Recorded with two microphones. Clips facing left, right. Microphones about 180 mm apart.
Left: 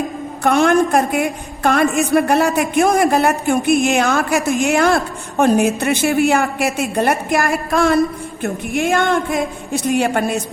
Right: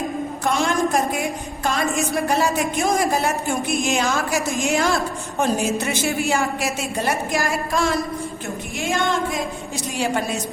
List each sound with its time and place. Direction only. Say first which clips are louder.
0.4 s a woman's voice: left 8 dB; 60° left (ahead or behind)